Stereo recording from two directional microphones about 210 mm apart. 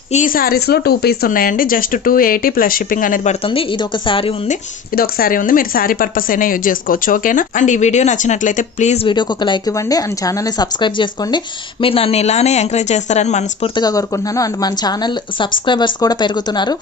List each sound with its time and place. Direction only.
0.1 s speech: 40° left (ahead or behind)
3.4 s speech: 25° left (ahead or behind)
4.9 s speech: 45° left (ahead or behind)
13.7 s speech: 20° left (ahead or behind)